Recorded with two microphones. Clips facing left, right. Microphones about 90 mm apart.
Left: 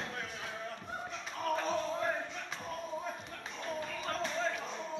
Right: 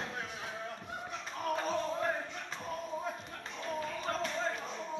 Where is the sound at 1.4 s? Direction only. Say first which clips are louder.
Even; 5° right (ahead or behind).